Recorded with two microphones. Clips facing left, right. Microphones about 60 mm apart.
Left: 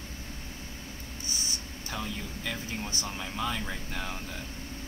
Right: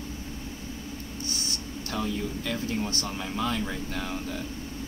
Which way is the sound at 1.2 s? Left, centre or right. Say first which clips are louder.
Right 2 dB; right.